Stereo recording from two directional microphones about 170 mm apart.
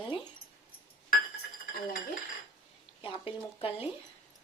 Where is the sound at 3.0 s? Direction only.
35° left (ahead or behind).